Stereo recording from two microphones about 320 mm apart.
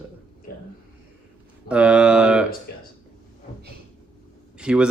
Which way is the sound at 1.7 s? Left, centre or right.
Centre.